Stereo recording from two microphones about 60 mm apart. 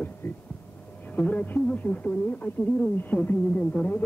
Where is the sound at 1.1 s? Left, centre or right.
Left.